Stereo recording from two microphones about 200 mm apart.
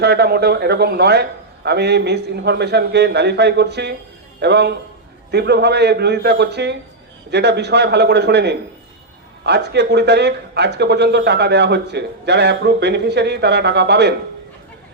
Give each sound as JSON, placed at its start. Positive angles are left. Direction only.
{"t": 0.0, "sound": "a man's voice", "side_deg": -55}